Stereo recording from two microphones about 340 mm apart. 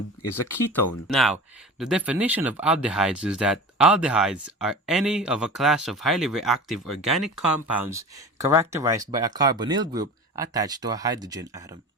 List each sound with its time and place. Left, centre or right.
0.2 s speech: left
1.0 s speech: centre